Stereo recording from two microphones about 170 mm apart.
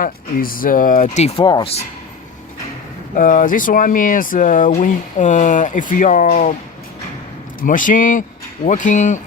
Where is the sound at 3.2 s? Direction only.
50° left (ahead or behind).